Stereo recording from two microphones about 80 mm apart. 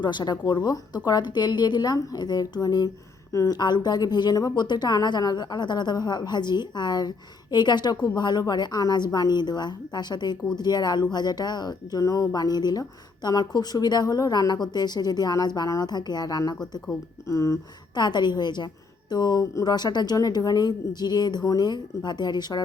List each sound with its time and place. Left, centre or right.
0.0 s speech: left
17.2 s speech: left
17.9 s a woman's voice: left